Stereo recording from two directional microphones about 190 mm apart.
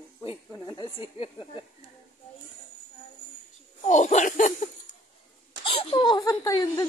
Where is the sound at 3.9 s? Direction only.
40° left (ahead or behind).